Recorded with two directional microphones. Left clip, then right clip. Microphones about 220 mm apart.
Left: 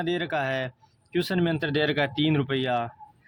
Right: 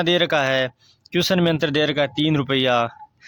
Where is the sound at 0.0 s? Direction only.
35° right (ahead or behind).